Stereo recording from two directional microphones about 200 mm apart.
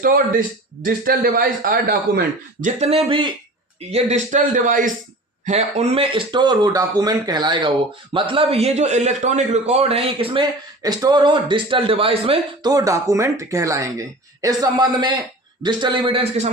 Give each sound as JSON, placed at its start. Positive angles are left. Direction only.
{"t": 0.0, "sound": "speech", "side_deg": -45}
{"t": 3.9, "sound": "a man's voice", "side_deg": -35}